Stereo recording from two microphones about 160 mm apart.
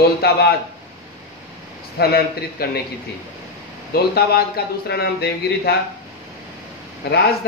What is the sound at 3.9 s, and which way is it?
A man's voice, 80° left.